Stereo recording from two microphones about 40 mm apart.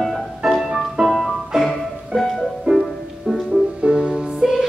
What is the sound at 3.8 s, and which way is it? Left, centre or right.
Music, right.